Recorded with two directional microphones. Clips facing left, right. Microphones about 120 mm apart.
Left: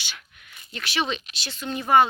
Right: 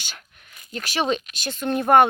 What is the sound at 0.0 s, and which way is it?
Speech, 40° right (ahead or behind).